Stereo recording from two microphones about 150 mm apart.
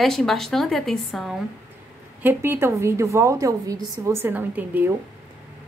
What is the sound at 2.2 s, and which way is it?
A woman's voice, 15° right (ahead or behind).